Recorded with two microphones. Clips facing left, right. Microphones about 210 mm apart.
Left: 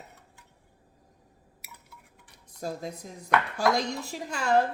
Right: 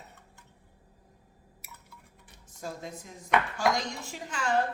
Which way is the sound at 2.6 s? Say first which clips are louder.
Left 4 dB; 40° left (ahead or behind).